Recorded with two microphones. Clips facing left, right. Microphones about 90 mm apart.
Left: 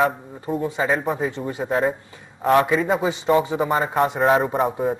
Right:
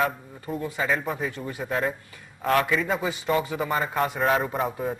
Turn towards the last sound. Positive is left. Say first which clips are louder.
# left 6 dB
turn(degrees=30)  # may be behind; listen again after turning